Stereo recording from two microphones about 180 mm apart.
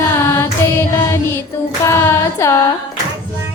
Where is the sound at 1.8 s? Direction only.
15° left (ahead or behind).